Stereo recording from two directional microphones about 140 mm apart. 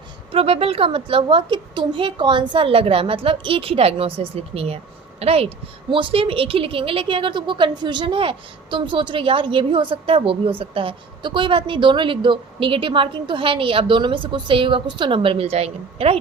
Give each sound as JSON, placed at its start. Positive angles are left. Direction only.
{"t": 0.3, "sound": "a woman's voice", "side_deg": -40}